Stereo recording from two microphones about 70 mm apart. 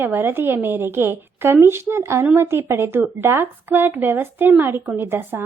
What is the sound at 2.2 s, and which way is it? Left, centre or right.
Speech, right.